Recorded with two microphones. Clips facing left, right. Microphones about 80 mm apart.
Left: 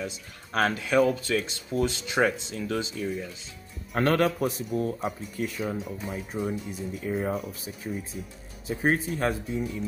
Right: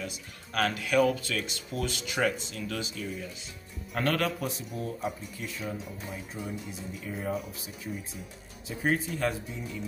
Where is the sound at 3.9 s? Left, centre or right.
Left.